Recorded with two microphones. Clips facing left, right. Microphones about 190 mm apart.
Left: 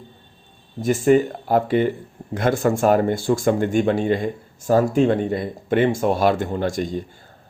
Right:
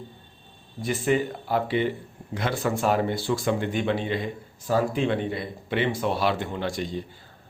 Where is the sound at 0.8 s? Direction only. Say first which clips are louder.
Left 8 dB; 45° left (ahead or behind).